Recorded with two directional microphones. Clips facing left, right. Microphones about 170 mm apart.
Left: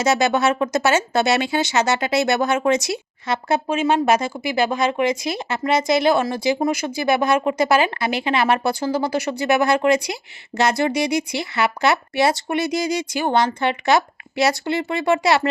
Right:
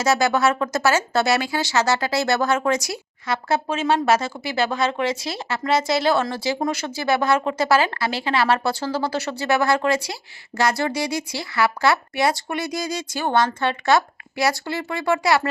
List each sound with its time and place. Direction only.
0.0 s speech: 20° left (ahead or behind)